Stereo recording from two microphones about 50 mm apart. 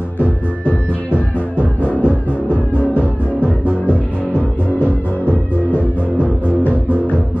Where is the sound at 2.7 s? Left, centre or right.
Right.